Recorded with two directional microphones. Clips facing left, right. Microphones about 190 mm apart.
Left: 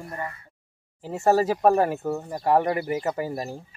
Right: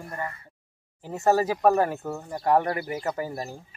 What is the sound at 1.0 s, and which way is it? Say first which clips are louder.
Speech: left 2 dB; 10° left (ahead or behind).